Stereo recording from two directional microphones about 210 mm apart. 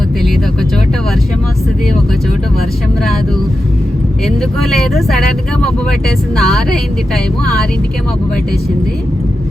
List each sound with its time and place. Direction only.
4.6 s a woman's voice: centre (ahead or behind)
6.3 s a woman's voice: centre (ahead or behind)